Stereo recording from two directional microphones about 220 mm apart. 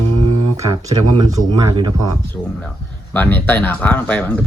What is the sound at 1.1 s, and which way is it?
Speech, 20° right (ahead or behind).